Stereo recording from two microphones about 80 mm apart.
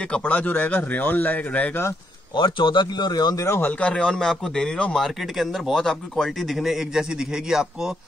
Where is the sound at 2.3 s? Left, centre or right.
Left.